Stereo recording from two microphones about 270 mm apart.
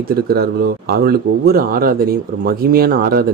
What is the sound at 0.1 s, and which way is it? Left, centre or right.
Speech, right.